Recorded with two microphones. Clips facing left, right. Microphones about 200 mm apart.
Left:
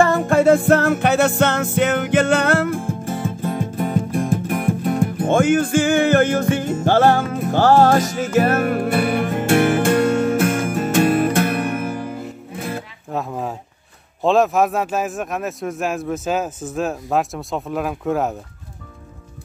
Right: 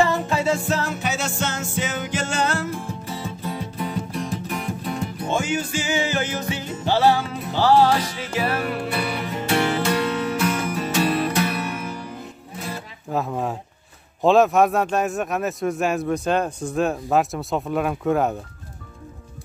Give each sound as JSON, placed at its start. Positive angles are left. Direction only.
{"t": 0.0, "sound": "music", "side_deg": 50}
{"t": 13.1, "sound": "a man's voice", "side_deg": 0}